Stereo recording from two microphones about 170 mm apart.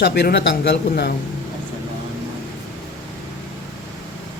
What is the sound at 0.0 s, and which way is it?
A man's voice, 75° left (ahead or behind).